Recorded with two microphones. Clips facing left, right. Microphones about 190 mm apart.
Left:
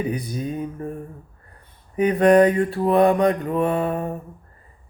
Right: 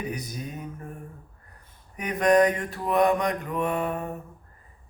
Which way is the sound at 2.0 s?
30° left (ahead or behind).